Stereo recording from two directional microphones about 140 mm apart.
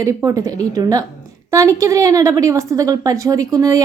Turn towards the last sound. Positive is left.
turn(degrees=-25)  # may be behind; listen again after turning